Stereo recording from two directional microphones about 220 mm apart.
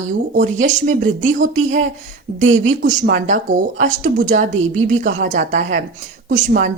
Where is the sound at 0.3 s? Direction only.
35° right (ahead or behind).